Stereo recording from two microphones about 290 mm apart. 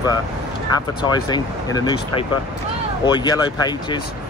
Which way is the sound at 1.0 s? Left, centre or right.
Centre.